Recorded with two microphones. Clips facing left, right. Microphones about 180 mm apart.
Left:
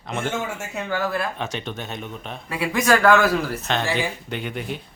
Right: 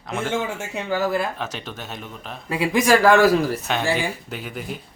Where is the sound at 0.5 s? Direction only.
20° right (ahead or behind).